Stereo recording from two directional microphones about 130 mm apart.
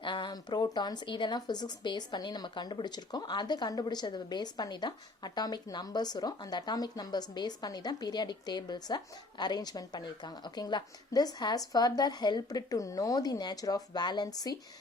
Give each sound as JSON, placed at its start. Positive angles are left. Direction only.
{"t": 0.0, "sound": "speech", "side_deg": 35}